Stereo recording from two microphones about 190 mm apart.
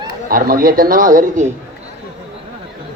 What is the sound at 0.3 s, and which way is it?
A man's voice, 50° right (ahead or behind).